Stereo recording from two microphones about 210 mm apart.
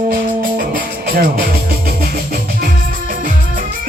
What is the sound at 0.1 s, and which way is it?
Music, 45° right (ahead or behind).